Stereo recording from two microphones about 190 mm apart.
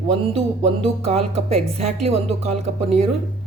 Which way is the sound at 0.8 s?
35° right (ahead or behind).